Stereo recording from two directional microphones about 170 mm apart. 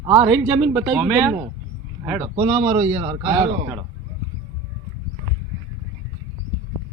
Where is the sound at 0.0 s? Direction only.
25° right (ahead or behind).